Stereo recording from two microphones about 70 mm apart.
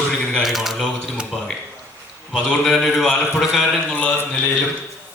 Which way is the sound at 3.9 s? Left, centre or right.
Left.